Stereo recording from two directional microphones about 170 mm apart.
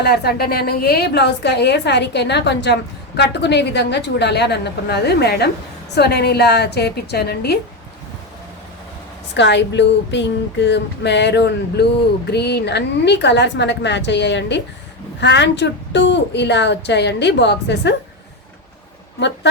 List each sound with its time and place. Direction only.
0.0 s a woman's voice: 70° left (ahead or behind)
9.3 s a woman's voice: 90° left